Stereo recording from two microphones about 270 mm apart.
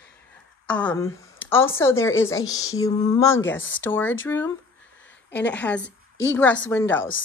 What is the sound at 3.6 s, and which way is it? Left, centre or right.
Speech, left.